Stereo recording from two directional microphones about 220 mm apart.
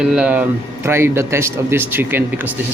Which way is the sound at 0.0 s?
5° right (ahead or behind).